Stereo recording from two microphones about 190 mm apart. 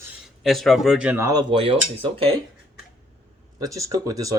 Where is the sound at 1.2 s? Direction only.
25° right (ahead or behind).